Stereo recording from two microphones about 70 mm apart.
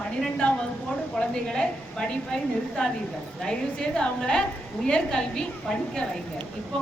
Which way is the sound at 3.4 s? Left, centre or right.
Centre.